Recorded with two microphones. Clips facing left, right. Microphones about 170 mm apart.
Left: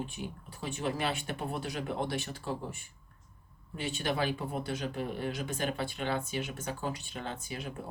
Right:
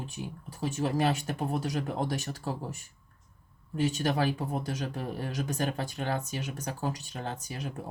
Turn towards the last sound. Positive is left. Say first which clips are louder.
# right 2 dB
turn(degrees=-40)  # may be behind; listen again after turning